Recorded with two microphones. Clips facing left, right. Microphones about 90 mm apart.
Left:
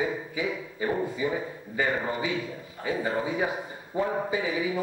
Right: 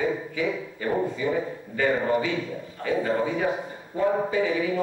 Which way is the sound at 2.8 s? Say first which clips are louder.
Right 4 dB; 10° left (ahead or behind).